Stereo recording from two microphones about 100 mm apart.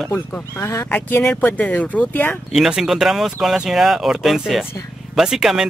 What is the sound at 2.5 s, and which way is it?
Speech, 5° right (ahead or behind).